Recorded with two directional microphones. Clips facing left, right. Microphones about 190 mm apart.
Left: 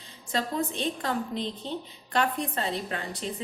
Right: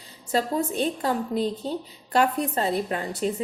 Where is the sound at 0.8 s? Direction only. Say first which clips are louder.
Right 4 dB; 35° right (ahead or behind).